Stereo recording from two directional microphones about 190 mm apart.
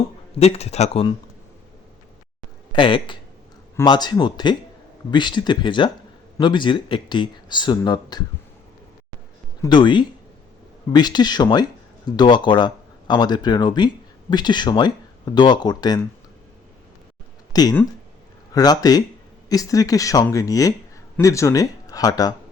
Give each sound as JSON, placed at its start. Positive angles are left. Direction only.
{"t": 0.3, "sound": "speech", "side_deg": 35}
{"t": 2.7, "sound": "speech", "side_deg": 25}
{"t": 9.6, "sound": "speech", "side_deg": 25}
{"t": 17.5, "sound": "speech", "side_deg": 20}